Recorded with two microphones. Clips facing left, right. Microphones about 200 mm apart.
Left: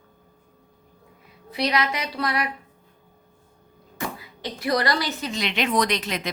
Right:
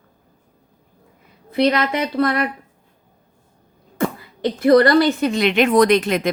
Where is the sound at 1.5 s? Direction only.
50° right (ahead or behind).